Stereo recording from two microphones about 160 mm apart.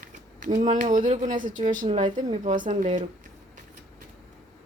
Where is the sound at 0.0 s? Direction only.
55° right (ahead or behind).